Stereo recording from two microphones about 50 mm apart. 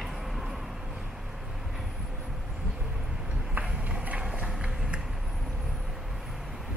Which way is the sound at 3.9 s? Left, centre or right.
Right.